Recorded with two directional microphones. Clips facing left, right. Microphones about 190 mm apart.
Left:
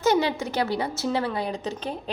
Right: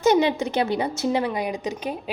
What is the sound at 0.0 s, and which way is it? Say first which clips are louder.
A woman's voice: right 3 dB; 20° right (ahead or behind).